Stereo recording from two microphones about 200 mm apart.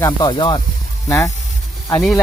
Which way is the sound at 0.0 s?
20° left (ahead or behind).